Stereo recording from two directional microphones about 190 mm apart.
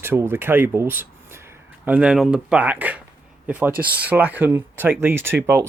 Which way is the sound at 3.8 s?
50° right (ahead or behind).